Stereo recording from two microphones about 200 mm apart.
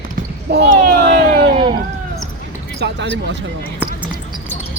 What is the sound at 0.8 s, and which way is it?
Vehicle, 55° right (ahead or behind).